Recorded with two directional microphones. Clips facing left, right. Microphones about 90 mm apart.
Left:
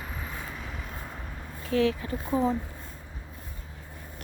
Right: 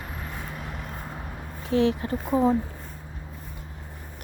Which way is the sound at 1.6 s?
25° right (ahead or behind).